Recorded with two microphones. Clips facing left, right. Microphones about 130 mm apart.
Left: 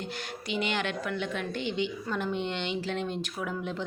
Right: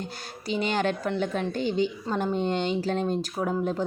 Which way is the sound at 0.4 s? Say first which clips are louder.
Right 5 dB; 40° right (ahead or behind).